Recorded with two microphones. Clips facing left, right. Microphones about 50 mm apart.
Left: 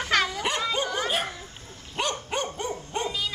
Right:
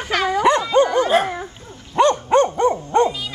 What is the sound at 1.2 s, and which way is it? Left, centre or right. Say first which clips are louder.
Speech: right 9 dB; right.